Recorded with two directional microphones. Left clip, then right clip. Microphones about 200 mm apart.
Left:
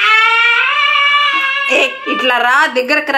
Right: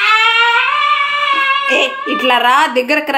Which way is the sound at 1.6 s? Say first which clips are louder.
Left 1 dB; 10° right (ahead or behind).